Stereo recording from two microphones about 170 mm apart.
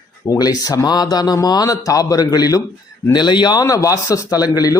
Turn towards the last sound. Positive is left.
turn(degrees=20)  # may be behind; listen again after turning